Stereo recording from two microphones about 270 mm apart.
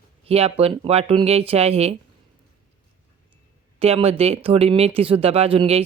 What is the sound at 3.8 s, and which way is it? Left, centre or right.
Speech, right.